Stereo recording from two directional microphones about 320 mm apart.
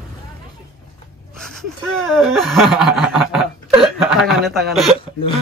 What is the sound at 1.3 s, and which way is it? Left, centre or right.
Speech, centre.